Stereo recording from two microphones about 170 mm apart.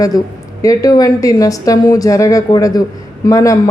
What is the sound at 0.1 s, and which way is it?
Speech, 20° left (ahead or behind).